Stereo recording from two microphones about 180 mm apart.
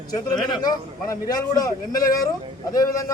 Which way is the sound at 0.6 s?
20° left (ahead or behind).